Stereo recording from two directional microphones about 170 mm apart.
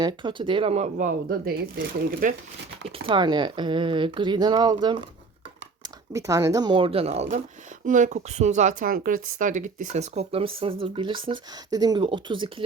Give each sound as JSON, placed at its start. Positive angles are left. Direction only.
{"t": 0.0, "sound": "speech", "side_deg": -25}
{"t": 2.8, "sound": "speech", "side_deg": -30}